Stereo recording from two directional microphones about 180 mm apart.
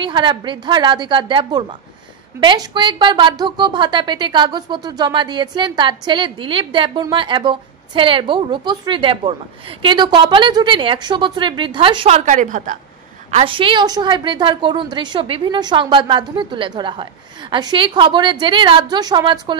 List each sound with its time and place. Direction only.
0.0 s a woman's voice: 25° right (ahead or behind)
12.3 s a woman's voice: 45° right (ahead or behind)
13.3 s a woman's voice: 30° right (ahead or behind)